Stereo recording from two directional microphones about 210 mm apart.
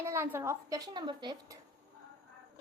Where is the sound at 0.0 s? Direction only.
10° right (ahead or behind).